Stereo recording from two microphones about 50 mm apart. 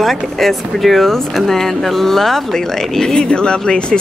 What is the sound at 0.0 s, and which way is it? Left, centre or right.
A woman's voice, centre.